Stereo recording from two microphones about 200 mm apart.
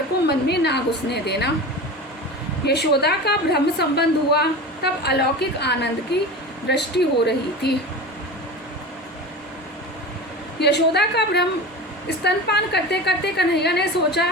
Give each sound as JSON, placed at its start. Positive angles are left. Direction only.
{"t": 0.3, "sound": "a woman's voice", "side_deg": 55}
{"t": 2.6, "sound": "a woman's voice", "side_deg": 55}
{"t": 10.6, "sound": "a woman's voice", "side_deg": 55}